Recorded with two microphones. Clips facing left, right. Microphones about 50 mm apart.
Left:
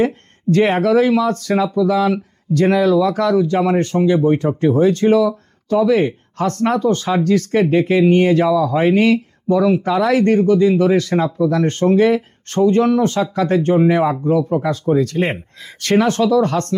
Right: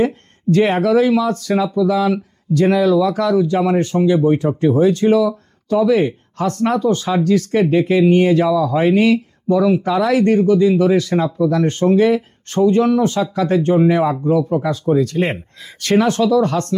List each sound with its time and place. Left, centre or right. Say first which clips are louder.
0.5 s speech: even; left